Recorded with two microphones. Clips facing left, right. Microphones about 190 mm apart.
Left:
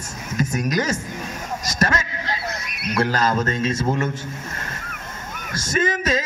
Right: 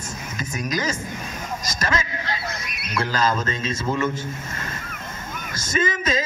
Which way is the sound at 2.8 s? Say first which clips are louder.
Left 3 dB; 55° left (ahead or behind).